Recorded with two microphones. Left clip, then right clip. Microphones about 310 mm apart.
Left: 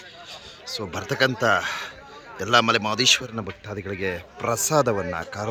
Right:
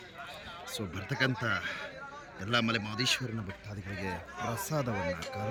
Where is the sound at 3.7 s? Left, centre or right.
Left.